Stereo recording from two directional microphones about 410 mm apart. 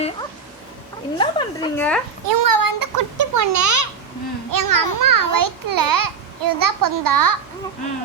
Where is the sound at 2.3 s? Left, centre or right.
Right.